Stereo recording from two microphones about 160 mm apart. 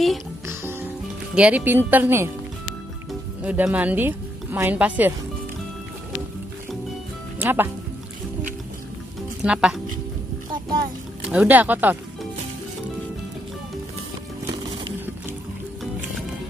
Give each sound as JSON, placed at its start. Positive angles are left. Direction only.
{"t": 0.5, "sound": "music", "side_deg": -15}
{"t": 1.3, "sound": "speech", "side_deg": -10}
{"t": 3.4, "sound": "speech", "side_deg": -10}
{"t": 7.3, "sound": "speech", "side_deg": -15}
{"t": 9.4, "sound": "speech", "side_deg": -5}
{"t": 10.5, "sound": "music", "side_deg": -25}
{"t": 11.2, "sound": "speech", "side_deg": -10}